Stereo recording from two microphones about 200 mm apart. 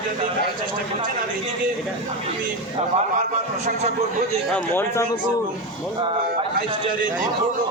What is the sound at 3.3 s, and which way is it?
Speech, 35° right (ahead or behind).